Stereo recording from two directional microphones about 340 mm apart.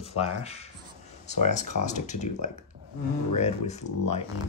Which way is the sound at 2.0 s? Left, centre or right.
Left.